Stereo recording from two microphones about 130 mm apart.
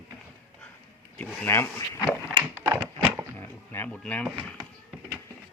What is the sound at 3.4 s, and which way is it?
Speech, 15° left (ahead or behind).